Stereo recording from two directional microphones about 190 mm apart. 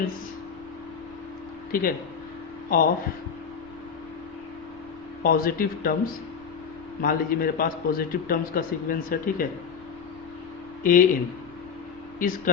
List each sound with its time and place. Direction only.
1.7 s a man's voice: 50° left (ahead or behind)
5.2 s a man's voice: 50° left (ahead or behind)
7.0 s a man's voice: 50° left (ahead or behind)
10.8 s a man's voice: 45° left (ahead or behind)